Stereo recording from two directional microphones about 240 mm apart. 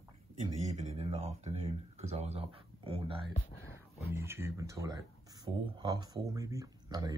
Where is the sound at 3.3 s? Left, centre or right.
Left.